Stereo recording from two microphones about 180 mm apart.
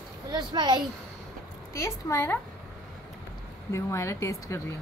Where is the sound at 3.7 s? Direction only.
15° left (ahead or behind).